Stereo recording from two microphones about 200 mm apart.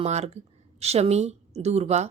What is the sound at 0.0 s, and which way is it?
A woman's voice, 35° right (ahead or behind).